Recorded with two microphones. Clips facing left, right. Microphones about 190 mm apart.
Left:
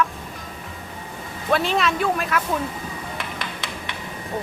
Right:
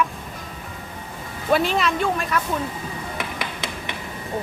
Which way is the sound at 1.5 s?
Centre (ahead or behind).